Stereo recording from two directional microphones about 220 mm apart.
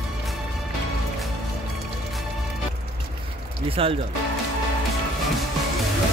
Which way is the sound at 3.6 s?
25° right (ahead or behind).